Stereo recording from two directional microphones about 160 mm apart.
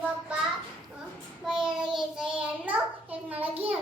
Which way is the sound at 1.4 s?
5° right (ahead or behind).